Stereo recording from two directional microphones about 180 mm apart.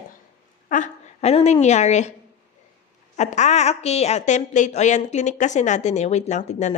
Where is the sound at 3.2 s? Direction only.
40° left (ahead or behind).